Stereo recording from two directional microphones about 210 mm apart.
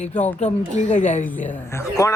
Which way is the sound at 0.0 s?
35° left (ahead or behind).